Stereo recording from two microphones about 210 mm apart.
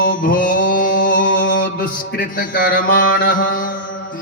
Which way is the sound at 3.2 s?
40° left (ahead or behind).